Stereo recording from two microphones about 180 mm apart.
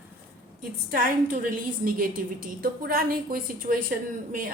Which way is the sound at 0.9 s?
50° right (ahead or behind).